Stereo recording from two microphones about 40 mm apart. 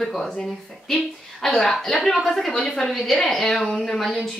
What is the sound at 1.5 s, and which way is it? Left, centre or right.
A woman's voice, centre.